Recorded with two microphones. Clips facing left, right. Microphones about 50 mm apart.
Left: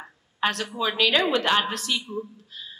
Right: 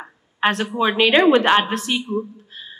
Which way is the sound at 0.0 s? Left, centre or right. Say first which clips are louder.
Right 6 dB; right.